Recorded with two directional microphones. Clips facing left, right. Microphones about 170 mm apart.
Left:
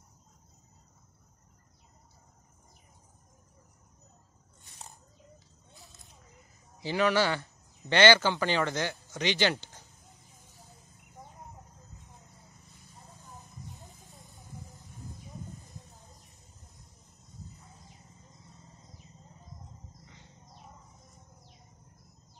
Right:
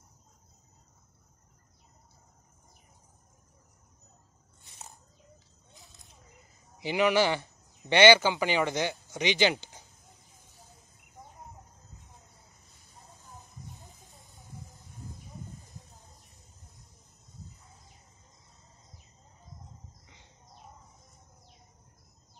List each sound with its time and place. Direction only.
6.8 s speech: 15° right (ahead or behind)